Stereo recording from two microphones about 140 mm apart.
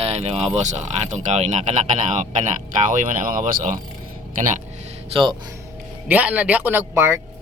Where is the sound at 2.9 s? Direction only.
70° right (ahead or behind).